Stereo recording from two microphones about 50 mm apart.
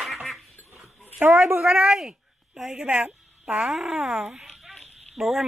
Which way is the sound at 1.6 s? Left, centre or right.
Centre.